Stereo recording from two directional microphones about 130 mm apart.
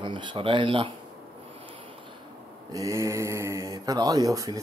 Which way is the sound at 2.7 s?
25° right (ahead or behind).